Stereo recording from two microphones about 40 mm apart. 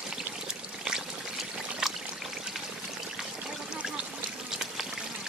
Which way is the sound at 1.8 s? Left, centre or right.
Centre.